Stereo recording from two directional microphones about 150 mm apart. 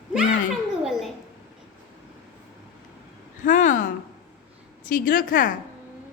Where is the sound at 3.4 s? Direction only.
55° left (ahead or behind).